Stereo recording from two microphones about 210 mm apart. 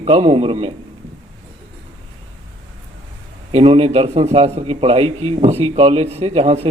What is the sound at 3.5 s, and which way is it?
Speech, 30° right (ahead or behind).